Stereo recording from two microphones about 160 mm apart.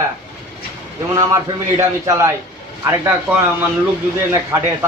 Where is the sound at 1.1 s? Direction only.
20° right (ahead or behind).